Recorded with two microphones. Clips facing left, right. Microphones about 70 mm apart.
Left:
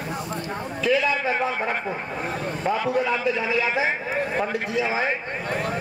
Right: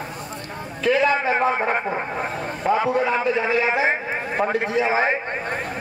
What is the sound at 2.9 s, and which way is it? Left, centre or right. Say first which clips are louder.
A man's voice: right 2 dB; right.